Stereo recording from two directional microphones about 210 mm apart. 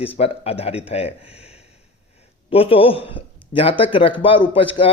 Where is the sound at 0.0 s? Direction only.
30° left (ahead or behind).